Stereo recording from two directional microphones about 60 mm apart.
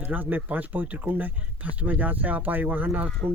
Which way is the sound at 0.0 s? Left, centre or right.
Right.